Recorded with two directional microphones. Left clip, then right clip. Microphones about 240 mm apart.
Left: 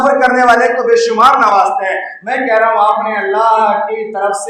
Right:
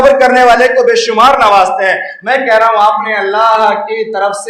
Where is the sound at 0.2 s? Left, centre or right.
Right.